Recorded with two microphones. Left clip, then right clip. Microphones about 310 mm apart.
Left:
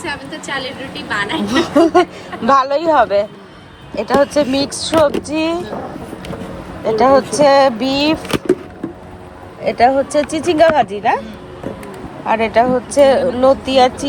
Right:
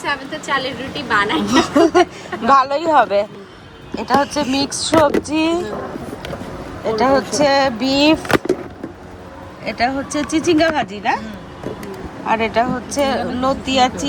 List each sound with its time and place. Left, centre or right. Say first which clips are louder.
0.1 s a woman's voice: right 5 dB; right
1.4 s speech: left 5 dB; centre
4.5 s speech: left 1 dB; centre
6.8 s speech: left 4 dB; centre
9.6 s speech: left 7 dB; centre
12.2 s speech: left 4 dB; centre